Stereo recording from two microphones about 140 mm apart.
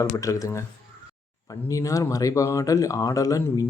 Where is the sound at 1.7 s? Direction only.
25° left (ahead or behind).